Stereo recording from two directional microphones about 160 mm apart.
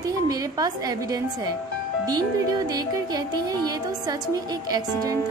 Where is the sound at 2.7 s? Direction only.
25° right (ahead or behind).